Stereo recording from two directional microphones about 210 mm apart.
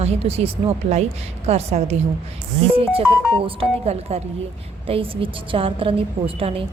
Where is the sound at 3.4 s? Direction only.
25° right (ahead or behind).